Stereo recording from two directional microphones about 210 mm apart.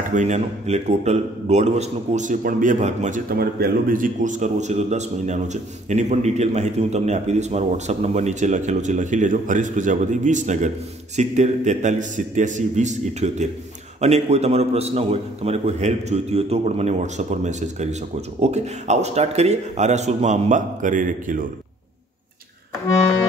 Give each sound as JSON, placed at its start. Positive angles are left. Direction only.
{"t": 0.1, "sound": "a man's voice", "side_deg": -35}